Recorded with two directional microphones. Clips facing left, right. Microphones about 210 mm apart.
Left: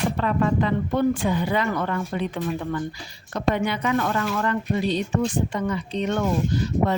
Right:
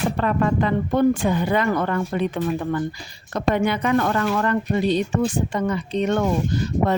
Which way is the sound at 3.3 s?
50° right (ahead or behind).